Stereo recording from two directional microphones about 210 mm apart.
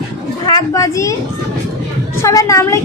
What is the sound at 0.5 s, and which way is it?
Speech, 15° left (ahead or behind).